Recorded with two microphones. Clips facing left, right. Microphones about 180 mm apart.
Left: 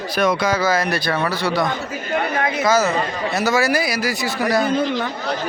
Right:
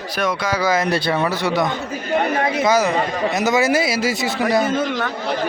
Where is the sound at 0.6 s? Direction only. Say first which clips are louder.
Right 1 dB; 20° right (ahead or behind).